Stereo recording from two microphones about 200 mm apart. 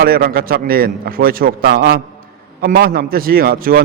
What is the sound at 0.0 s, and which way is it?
A man's voice, 50° right (ahead or behind).